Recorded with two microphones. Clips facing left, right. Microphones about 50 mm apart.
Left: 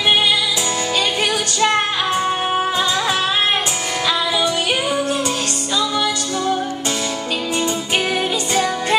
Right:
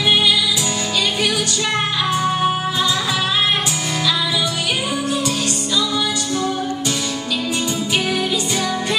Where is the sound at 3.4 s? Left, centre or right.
Left.